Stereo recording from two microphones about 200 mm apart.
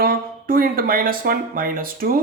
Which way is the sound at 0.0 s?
45° right (ahead or behind).